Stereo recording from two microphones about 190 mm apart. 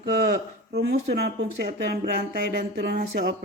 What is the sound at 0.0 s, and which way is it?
Speech, 55° right (ahead or behind).